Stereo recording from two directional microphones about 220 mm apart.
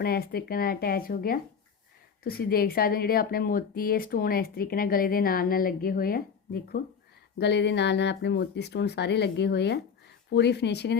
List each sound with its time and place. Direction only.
0.0 s a woman's voice: 45° left (ahead or behind)